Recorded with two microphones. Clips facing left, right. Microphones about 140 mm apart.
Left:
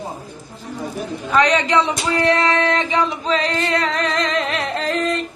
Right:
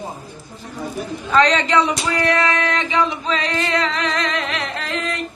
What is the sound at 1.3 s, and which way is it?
Speech, 10° left (ahead or behind).